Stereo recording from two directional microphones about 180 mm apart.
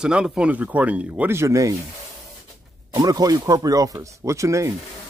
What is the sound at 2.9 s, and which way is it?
Speech, 20° right (ahead or behind).